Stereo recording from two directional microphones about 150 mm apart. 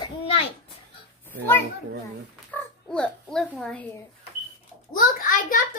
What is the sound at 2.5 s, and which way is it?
Speech, 5° left (ahead or behind).